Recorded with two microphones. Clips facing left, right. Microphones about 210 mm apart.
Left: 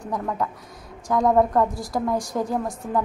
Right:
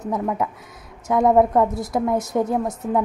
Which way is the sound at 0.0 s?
20° right (ahead or behind).